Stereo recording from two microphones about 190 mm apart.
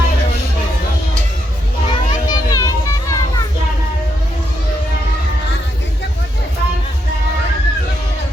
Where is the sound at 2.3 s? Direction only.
20° left (ahead or behind).